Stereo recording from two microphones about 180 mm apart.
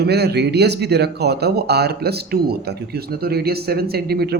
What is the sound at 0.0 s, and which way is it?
Speech, 65° right (ahead or behind).